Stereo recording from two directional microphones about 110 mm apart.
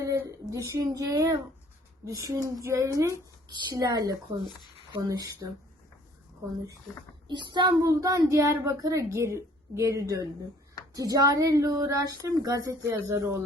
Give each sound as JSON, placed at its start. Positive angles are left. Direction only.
{"t": 0.2, "sound": "a child's voice", "side_deg": -30}
{"t": 3.5, "sound": "speech", "side_deg": -40}
{"t": 7.3, "sound": "a child's voice", "side_deg": -45}
{"t": 7.8, "sound": "a child's voice", "side_deg": -30}